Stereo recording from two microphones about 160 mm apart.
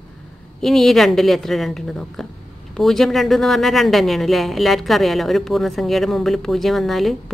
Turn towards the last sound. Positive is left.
turn(degrees=0)  # may be behind; listen again after turning